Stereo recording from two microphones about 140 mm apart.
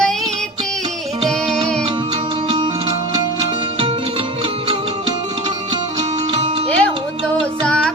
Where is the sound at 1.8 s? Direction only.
35° right (ahead or behind).